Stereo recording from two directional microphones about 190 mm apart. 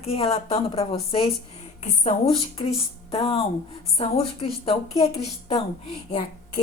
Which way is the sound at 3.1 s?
30° left (ahead or behind).